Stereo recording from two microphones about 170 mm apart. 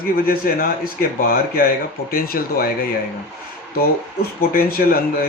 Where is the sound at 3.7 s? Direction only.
65° left (ahead or behind).